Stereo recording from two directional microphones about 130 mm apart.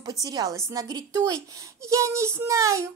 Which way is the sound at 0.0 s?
30° right (ahead or behind).